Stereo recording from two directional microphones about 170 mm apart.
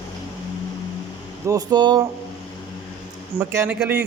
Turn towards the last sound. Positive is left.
turn(degrees=-5)  # may be behind; listen again after turning